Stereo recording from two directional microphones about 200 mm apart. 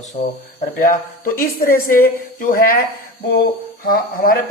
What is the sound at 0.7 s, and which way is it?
Speech, 45° left (ahead or behind).